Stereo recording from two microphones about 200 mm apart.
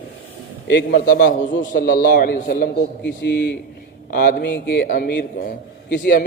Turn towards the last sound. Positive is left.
turn(degrees=45)  # may be behind; listen again after turning